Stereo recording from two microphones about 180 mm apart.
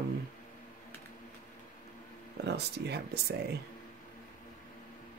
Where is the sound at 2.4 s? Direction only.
65° right (ahead or behind).